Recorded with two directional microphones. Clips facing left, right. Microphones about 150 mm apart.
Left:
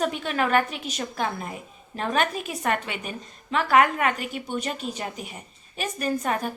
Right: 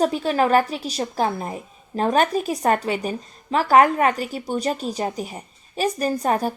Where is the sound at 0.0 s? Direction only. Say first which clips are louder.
Right 6 dB; 35° right (ahead or behind).